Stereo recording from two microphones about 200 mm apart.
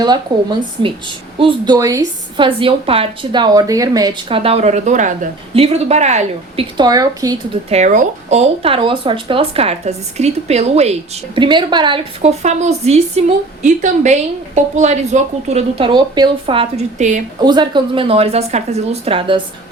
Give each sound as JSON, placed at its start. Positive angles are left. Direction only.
{"t": 0.3, "sound": "a woman's voice", "side_deg": -20}
{"t": 6.7, "sound": "a woman's voice", "side_deg": -20}
{"t": 7.7, "sound": "a woman's voice", "side_deg": -35}
{"t": 11.3, "sound": "a woman's voice", "side_deg": -25}
{"t": 17.4, "sound": "a woman's voice", "side_deg": -20}